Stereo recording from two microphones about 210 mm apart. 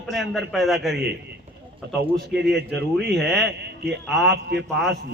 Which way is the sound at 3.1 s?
Centre (ahead or behind).